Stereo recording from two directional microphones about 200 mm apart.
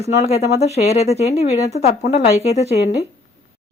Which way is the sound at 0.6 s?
30° left (ahead or behind).